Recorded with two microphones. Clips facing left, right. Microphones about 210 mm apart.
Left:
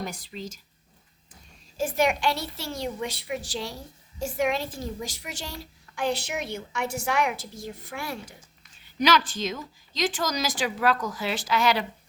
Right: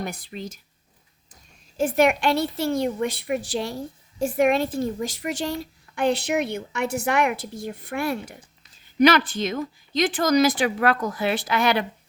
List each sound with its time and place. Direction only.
0.0 s a woman's voice: 60° right (ahead or behind)
1.7 s a woman's voice: 60° right (ahead or behind)